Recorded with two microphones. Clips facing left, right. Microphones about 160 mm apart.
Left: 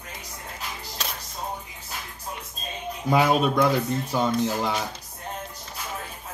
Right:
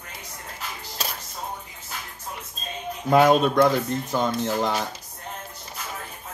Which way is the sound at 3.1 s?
5° left (ahead or behind).